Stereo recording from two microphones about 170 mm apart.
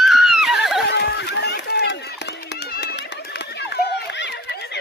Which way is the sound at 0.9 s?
90° left.